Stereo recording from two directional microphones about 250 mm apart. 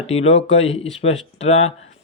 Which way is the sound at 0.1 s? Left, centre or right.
Left.